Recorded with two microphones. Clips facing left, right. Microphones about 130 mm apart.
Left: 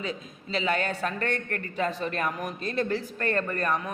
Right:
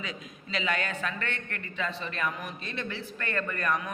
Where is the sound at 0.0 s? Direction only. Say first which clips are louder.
Left 5 dB; 35° left (ahead or behind).